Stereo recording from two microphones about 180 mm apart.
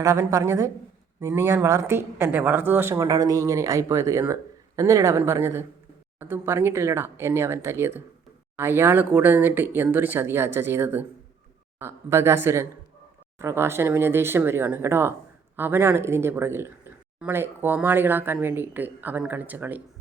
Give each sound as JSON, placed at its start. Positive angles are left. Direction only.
{"t": 0.0, "sound": "a woman's voice", "side_deg": -15}